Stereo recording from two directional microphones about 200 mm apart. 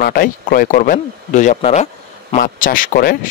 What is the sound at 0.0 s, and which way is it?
Speech, 45° left (ahead or behind).